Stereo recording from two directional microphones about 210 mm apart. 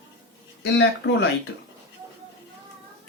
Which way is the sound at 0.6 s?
60° left (ahead or behind).